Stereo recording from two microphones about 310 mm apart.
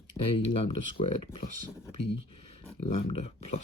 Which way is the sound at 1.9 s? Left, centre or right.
Centre.